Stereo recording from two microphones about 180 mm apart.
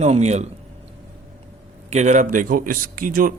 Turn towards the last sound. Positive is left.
turn(degrees=-50)  # may be behind; listen again after turning